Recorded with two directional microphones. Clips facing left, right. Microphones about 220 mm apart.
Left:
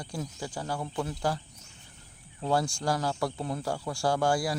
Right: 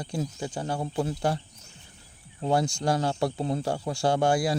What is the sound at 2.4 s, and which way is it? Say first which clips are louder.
Speech: right 3 dB; 20° right (ahead or behind).